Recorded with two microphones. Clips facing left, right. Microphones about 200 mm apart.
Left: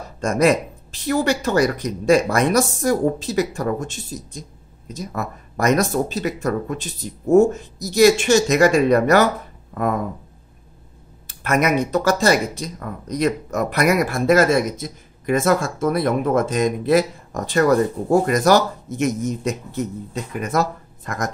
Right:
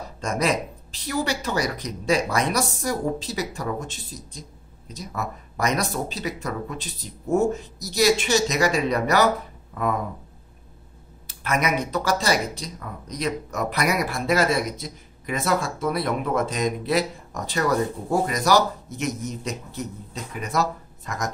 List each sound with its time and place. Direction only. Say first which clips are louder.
0.2 s speech: left 7 dB; 50° left (ahead or behind)
11.4 s speech: left 6 dB; 45° left (ahead or behind)